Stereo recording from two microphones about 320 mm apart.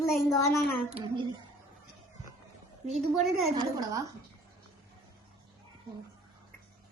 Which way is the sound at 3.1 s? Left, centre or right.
Centre.